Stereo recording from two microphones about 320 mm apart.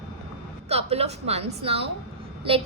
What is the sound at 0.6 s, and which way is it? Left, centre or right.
A woman's voice, centre.